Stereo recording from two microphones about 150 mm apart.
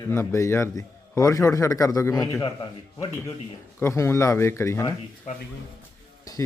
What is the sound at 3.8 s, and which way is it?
A man's voice, 15° left (ahead or behind).